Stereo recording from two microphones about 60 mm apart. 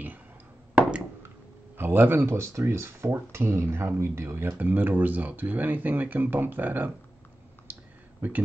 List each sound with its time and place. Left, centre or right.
0.8 s a sound: right
1.8 s speech: right
4.6 s speech: right
8.2 s speech: right